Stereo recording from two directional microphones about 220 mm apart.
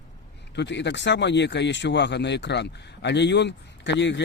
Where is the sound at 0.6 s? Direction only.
55° left (ahead or behind).